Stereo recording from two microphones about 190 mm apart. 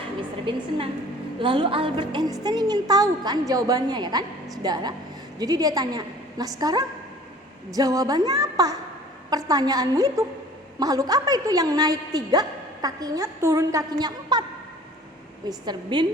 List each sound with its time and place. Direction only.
0.2 s a woman's voice: 25° right (ahead or behind)
15.4 s a woman's voice: 25° right (ahead or behind)